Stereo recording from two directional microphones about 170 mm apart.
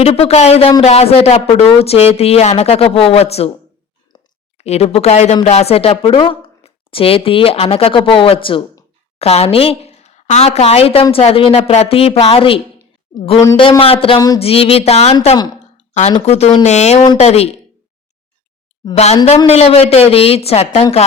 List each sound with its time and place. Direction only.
0.0 s speech: 35° left (ahead or behind)
4.5 s speech: 40° left (ahead or behind)
15.5 s a sound: 40° left (ahead or behind)
16.2 s speech: 40° left (ahead or behind)
19.5 s speech: 35° left (ahead or behind)